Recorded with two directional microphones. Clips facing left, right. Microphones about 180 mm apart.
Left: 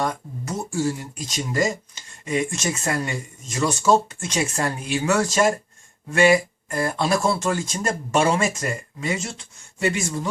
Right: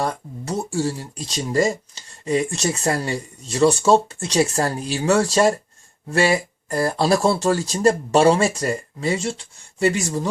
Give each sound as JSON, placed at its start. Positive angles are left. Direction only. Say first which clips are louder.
{"t": 0.0, "sound": "speech", "louder": "right 1 dB", "side_deg": -30}